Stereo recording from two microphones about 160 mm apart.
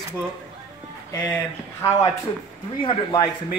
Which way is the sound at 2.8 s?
30° left (ahead or behind).